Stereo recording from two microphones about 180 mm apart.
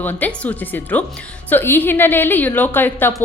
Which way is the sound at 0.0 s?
10° left (ahead or behind).